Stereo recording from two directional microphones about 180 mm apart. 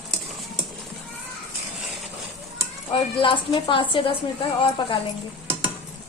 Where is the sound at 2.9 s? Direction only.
30° left (ahead or behind).